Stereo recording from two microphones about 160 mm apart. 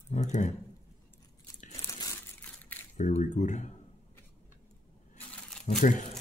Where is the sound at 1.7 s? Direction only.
20° left (ahead or behind).